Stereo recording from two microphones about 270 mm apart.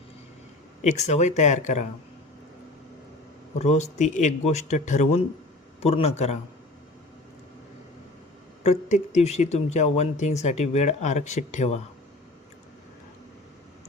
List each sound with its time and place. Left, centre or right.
0.8 s speech: left
3.6 s speech: left
8.6 s speech: left